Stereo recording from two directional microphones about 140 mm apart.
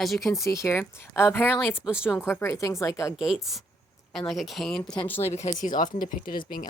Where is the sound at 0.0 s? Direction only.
Centre (ahead or behind).